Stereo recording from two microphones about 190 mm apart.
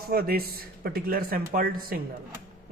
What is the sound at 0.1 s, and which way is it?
Speech, 55° right (ahead or behind).